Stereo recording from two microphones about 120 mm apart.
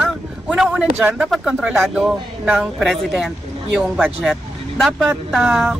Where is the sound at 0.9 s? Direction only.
15° right (ahead or behind).